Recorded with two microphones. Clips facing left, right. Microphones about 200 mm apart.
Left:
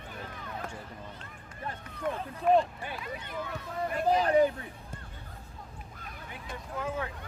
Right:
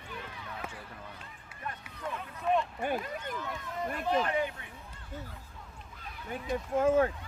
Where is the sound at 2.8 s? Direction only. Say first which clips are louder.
Right 6 dB; 45° right (ahead or behind).